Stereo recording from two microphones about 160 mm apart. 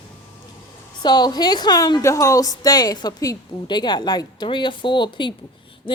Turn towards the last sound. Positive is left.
turn(degrees=30)  # may be behind; listen again after turning